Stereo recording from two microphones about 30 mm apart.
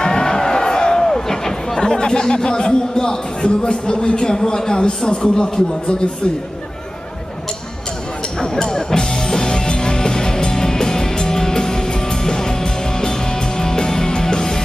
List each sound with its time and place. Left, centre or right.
0.0 s a sound: left
2.0 s speech: left
8.6 s music: left